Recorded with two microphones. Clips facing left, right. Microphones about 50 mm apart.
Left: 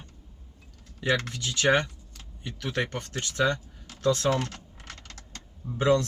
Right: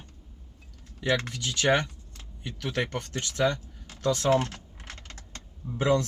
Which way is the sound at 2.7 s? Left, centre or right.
Centre.